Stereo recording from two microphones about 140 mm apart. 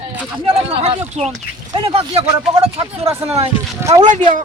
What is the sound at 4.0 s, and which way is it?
Speech, 60° right (ahead or behind).